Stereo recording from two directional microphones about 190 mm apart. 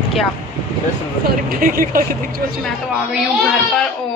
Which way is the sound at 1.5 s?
45° right (ahead or behind).